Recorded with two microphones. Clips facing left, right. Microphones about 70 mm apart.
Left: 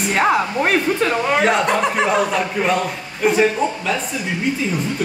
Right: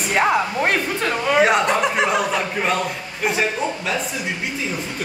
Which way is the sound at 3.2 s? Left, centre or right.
Centre.